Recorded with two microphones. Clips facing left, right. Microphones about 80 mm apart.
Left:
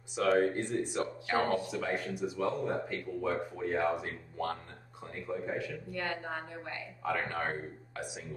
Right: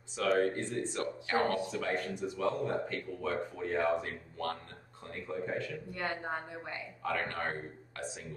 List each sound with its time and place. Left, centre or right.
0.4 s speech: centre
1.7 s speech: centre
5.9 s a woman's voice: right
7.0 s speech: centre